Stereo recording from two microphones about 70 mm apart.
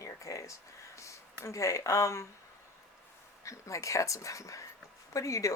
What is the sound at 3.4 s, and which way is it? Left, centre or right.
Speech, left.